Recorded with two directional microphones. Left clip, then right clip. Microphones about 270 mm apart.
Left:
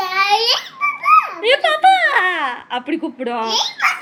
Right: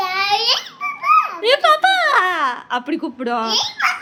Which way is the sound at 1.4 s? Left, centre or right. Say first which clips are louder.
Right 1 dB; right.